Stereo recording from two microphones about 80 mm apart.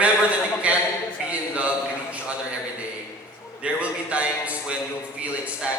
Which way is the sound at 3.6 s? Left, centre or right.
Centre.